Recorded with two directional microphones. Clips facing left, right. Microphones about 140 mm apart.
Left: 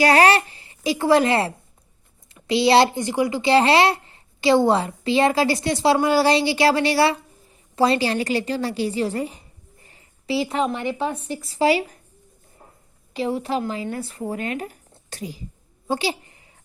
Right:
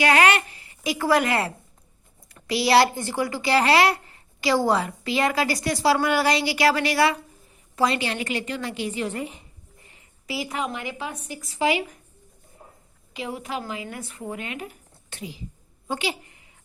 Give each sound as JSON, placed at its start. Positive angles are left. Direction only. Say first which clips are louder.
{"t": 0.0, "sound": "a child's voice", "louder": "left 4 dB", "side_deg": 35}
{"t": 9.8, "sound": "a sound", "louder": "left 7 dB", "side_deg": 30}
{"t": 11.0, "sound": "a woman's voice", "louder": "left 8 dB", "side_deg": 30}
{"t": 13.1, "sound": "a woman's voice", "louder": "left 7 dB", "side_deg": 35}